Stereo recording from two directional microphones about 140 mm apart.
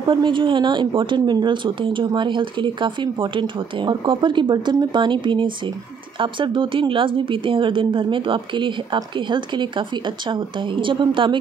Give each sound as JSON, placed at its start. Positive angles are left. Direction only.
{"t": 0.1, "sound": "speech", "side_deg": -35}